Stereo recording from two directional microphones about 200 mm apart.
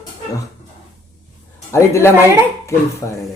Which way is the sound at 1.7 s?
15° left (ahead or behind).